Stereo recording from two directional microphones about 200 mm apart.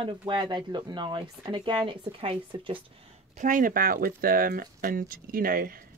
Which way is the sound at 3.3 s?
40° right (ahead or behind).